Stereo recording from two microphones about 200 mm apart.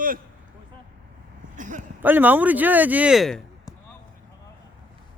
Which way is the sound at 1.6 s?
40° right (ahead or behind).